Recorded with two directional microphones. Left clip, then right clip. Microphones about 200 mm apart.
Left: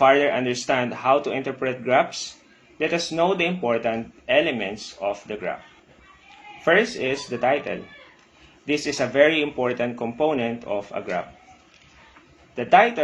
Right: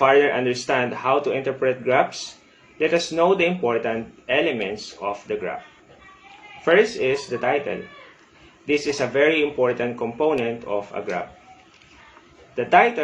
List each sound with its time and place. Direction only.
0.0 s speech: 40° left (ahead or behind)
6.7 s speech: 40° left (ahead or behind)
12.5 s speech: 40° left (ahead or behind)